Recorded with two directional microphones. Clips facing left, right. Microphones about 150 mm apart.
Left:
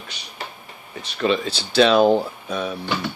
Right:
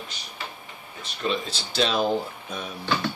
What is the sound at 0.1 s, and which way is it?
Speech, 70° left (ahead or behind).